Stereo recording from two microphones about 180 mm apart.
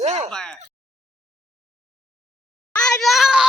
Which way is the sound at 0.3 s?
5° left (ahead or behind).